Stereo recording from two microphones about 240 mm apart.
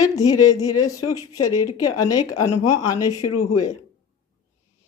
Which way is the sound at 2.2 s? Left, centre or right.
Left.